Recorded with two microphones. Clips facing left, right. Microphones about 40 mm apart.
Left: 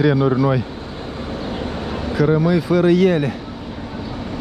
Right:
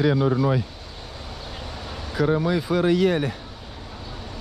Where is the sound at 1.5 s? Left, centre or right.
Left.